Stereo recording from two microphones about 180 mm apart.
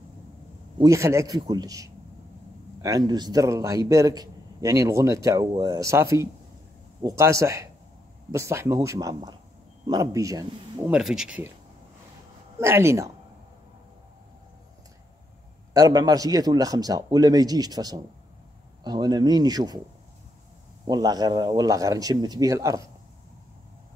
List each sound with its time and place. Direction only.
0.7 s a man's voice: 15° right (ahead or behind)
10.9 s speech: 5° right (ahead or behind)
12.5 s speech: 15° right (ahead or behind)
15.7 s a man's voice: 20° right (ahead or behind)
20.8 s a man's voice: 20° right (ahead or behind)